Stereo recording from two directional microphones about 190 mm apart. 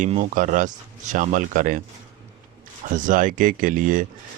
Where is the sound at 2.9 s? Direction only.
45° right (ahead or behind).